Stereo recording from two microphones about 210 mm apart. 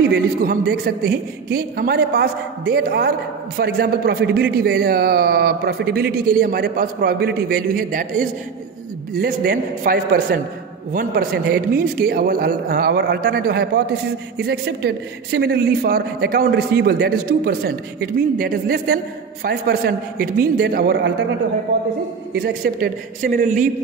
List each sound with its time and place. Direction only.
0.1 s a man's voice: 45° right (ahead or behind)
22.3 s a man's voice: 45° right (ahead or behind)